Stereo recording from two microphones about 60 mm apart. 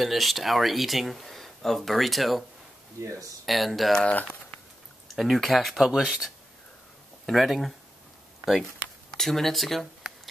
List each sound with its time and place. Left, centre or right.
0.0 s speech: centre
3.0 s speech: right
3.4 s speech: centre
4.1 s speech: left
5.0 s speech: centre
9.1 s speech: centre